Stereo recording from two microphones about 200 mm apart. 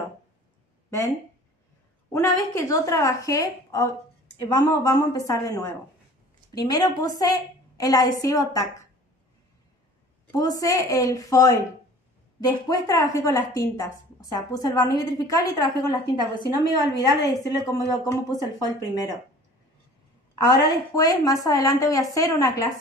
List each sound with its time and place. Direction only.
0.8 s speech: 15° left (ahead or behind)
2.1 s a woman's voice: 15° left (ahead or behind)
10.3 s a woman's voice: 15° left (ahead or behind)
16.2 s a woman's voice: 20° right (ahead or behind)
16.9 s a woman's voice: 20° left (ahead or behind)
20.4 s a woman's voice: 20° left (ahead or behind)